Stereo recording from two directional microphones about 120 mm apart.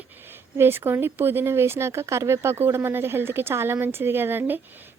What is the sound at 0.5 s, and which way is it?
Speech, 20° right (ahead or behind).